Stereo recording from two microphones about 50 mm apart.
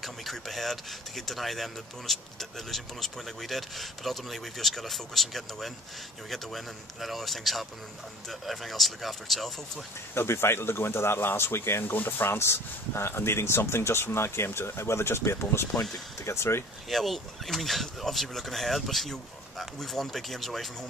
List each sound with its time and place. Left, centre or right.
0.0 s speech: centre
10.1 s speech: left
11.9 s speech: left
12.3 s speech: left
16.9 s speech: centre